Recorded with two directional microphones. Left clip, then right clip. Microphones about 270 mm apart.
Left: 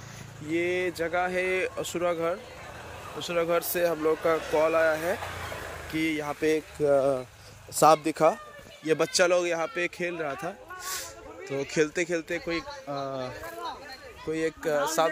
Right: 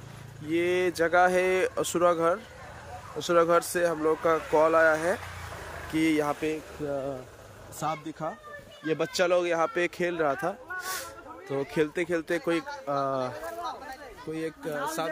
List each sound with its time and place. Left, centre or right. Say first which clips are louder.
0.5 s speech: right 2 dB; centre
6.9 s speech: left 10 dB; centre
8.8 s speech: left 3 dB; centre
14.3 s speech: left 6 dB; centre